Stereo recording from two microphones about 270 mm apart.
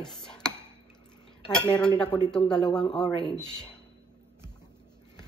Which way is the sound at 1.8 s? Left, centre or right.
Centre.